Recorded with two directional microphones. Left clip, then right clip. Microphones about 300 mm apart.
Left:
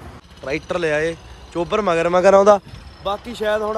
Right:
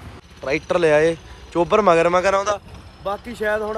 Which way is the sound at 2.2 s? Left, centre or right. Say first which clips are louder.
Left 8 dB; left.